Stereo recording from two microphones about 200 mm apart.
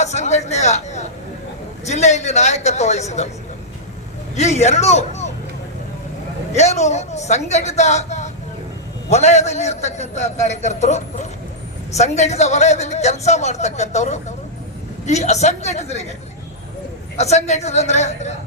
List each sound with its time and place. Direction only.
0.0 s a man's voice: 35° left (ahead or behind)
4.4 s a man's voice: 35° left (ahead or behind)
6.5 s a man's voice: 35° left (ahead or behind)
17.2 s a man's voice: 35° left (ahead or behind)